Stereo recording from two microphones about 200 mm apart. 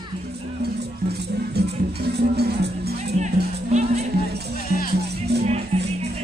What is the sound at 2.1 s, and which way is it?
Music, 55° right (ahead or behind).